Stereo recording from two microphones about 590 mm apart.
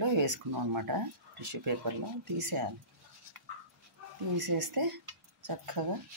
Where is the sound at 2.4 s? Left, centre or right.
Right.